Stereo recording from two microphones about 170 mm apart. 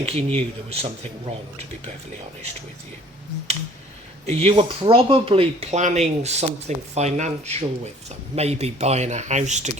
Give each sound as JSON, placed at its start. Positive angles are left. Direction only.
{"t": 0.0, "sound": "speech", "side_deg": -35}
{"t": 4.3, "sound": "speech", "side_deg": -35}